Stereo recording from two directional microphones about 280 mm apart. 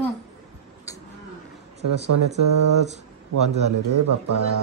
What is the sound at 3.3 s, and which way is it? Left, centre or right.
Speech, right.